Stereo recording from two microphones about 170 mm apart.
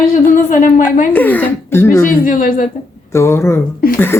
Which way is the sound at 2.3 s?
55° left (ahead or behind).